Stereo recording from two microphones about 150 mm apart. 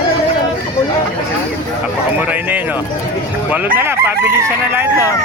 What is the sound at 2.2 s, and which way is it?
Speech, 10° right (ahead or behind).